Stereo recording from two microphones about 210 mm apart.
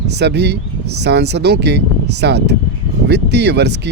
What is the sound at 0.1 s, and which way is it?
Speech, 55° right (ahead or behind).